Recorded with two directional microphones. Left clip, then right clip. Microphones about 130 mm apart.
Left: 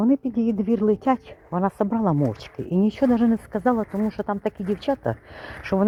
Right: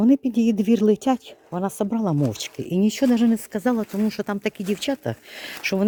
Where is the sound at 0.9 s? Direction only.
35° right (ahead or behind).